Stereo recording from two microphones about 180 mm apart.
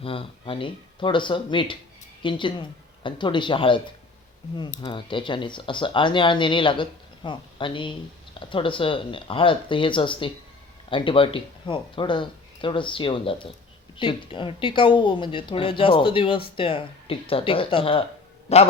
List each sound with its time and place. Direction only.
0.0 s a man's voice: 30° left (ahead or behind)